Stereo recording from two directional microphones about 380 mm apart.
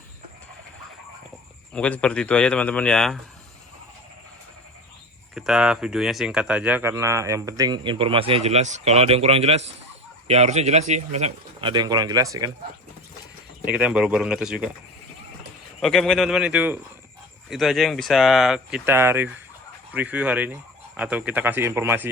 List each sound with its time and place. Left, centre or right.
1.7 s speech: centre
5.3 s speech: centre
13.7 s speech: centre
15.8 s speech: centre